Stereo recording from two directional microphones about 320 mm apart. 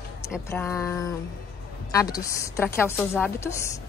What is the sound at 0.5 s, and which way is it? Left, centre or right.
Speech, centre.